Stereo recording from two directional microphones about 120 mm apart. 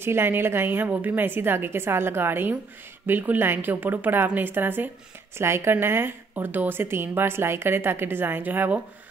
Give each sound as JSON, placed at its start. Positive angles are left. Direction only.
{"t": 0.0, "sound": "a woman's voice", "side_deg": -20}